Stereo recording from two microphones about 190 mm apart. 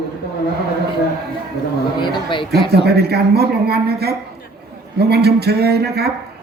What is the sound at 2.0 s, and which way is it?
Speech, 25° left (ahead or behind).